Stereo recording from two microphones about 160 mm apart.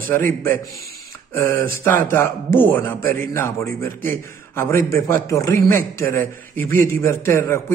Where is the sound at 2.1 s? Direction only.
15° left (ahead or behind).